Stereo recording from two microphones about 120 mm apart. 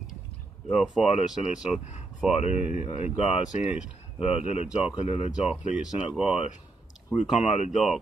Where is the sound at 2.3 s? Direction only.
70° left (ahead or behind).